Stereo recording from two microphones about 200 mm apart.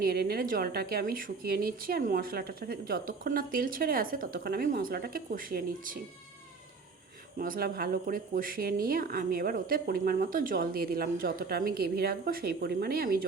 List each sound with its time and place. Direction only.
0.0 s a woman's voice: 50° right (ahead or behind)
7.3 s a woman's voice: 45° right (ahead or behind)